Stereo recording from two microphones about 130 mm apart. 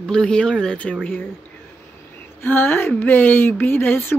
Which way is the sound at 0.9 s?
Centre (ahead or behind).